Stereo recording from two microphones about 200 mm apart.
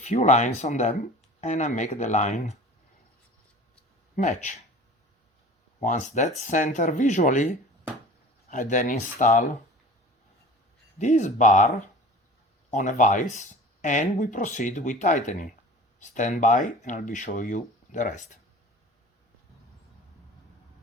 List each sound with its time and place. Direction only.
0.0 s speech: 35° left (ahead or behind)
4.1 s speech: 35° left (ahead or behind)
5.8 s speech: 40° left (ahead or behind)
10.9 s speech: 35° left (ahead or behind)
12.7 s speech: 40° left (ahead or behind)